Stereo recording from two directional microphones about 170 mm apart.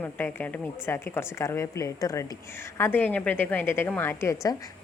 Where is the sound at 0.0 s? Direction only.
10° left (ahead or behind).